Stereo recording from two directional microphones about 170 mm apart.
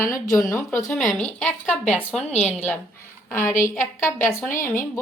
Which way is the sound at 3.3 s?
15° left (ahead or behind).